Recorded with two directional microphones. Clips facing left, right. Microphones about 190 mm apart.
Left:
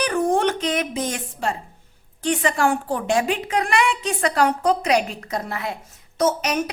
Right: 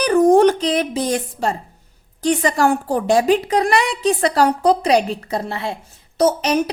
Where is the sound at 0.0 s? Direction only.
40° right (ahead or behind).